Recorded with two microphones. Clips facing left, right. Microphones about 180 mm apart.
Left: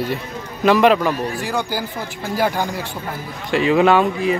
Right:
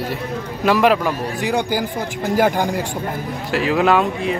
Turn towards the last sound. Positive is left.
turn(degrees=0)  # may be behind; listen again after turning